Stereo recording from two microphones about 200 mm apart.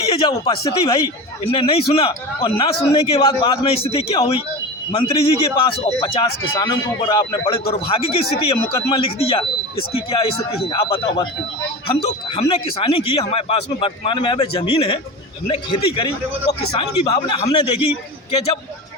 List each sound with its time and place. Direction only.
0.0 s speech: 25° left (ahead or behind)